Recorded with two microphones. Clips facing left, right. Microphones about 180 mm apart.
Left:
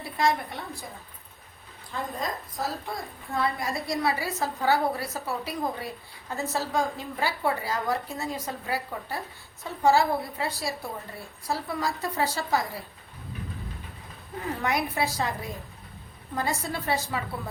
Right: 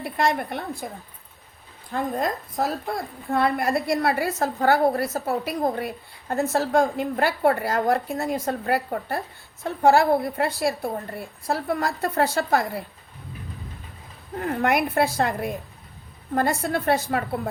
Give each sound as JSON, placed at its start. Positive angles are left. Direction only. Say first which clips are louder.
{"t": 0.0, "sound": "a woman's voice", "louder": "right 3 dB", "side_deg": -60}
{"t": 1.9, "sound": "a woman's voice", "louder": "right 7 dB", "side_deg": -60}
{"t": 14.3, "sound": "a woman's voice", "louder": "right 6 dB", "side_deg": -55}